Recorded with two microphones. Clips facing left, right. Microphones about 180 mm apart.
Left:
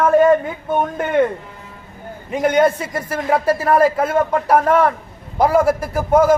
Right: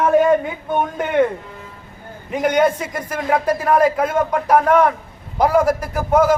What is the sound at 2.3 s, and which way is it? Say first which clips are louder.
Speech: left 1 dB; 10° right (ahead or behind).